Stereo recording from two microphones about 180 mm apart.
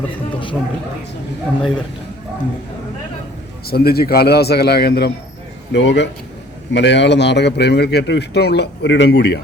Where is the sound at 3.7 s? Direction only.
60° left (ahead or behind).